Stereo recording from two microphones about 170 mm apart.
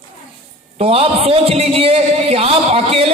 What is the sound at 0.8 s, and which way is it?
A man's voice, 35° right (ahead or behind).